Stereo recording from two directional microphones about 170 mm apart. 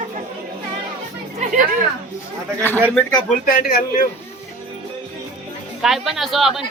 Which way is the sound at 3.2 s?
55° left (ahead or behind).